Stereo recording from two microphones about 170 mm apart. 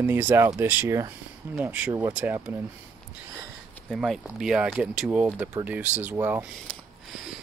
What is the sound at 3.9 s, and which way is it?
Speech, centre (ahead or behind).